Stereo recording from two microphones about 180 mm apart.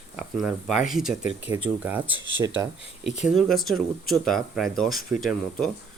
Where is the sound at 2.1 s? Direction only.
90° right.